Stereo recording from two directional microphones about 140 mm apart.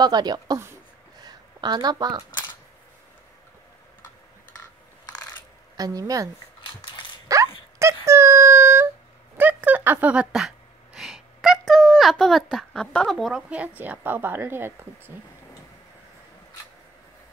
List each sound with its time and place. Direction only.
0.0 s speech: 30° right (ahead or behind)
1.2 s a sound: 30° right (ahead or behind)
5.8 s speech: 25° right (ahead or behind)
6.6 s mechanisms: 35° left (ahead or behind)
7.3 s wail: 25° right (ahead or behind)
7.8 s a sound: 20° right (ahead or behind); by 13.4 s centre (ahead or behind)
13.5 s a woman's voice: 10° right (ahead or behind)